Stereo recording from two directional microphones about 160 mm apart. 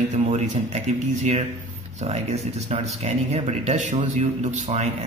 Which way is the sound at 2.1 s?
40° right (ahead or behind).